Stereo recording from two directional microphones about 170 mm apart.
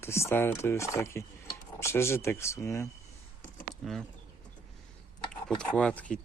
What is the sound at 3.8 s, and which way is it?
Speech, centre (ahead or behind).